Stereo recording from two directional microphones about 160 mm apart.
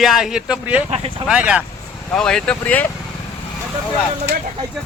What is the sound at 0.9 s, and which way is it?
Speech, 40° right (ahead or behind).